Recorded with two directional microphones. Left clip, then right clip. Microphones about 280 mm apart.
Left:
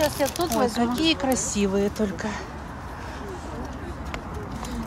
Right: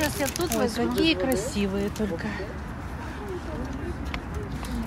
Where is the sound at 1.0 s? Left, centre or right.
Centre.